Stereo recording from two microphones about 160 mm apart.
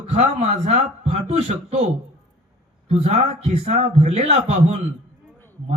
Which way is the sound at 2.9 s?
45° right (ahead or behind).